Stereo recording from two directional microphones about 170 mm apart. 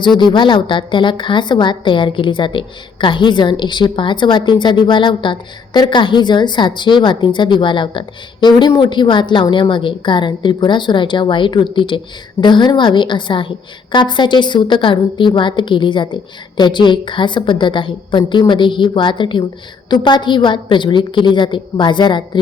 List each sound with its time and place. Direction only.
0.2 s a woman's voice: 25° left (ahead or behind)